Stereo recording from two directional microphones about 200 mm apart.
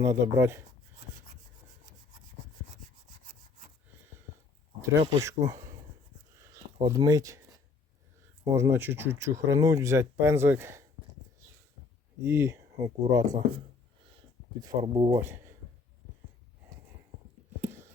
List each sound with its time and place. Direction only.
0.0 s speech: 15° right (ahead or behind)
4.8 s speech: 15° right (ahead or behind)
6.8 s speech: 15° right (ahead or behind)
8.5 s speech: 10° right (ahead or behind)
12.2 s speech: 10° right (ahead or behind)
14.6 s speech: 25° right (ahead or behind)